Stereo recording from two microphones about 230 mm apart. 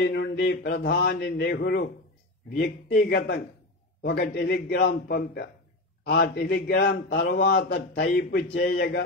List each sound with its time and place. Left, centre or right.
0.0 s a man's voice: left
4.0 s a man's voice: left